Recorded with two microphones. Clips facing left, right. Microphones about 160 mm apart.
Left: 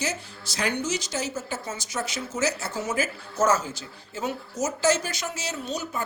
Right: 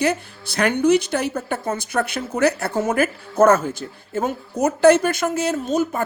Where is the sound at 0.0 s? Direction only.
60° right (ahead or behind).